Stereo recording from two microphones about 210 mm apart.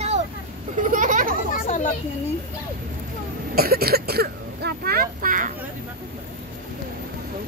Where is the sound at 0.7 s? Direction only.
40° right (ahead or behind).